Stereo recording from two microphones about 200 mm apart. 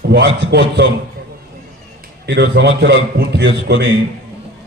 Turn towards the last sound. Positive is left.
turn(degrees=-55)  # may be behind; listen again after turning